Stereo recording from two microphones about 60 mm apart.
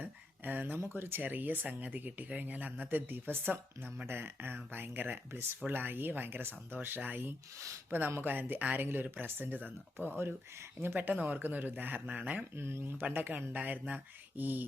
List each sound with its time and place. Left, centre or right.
0.0 s a sound: right
0.8 s speech: right
12.5 s speech: right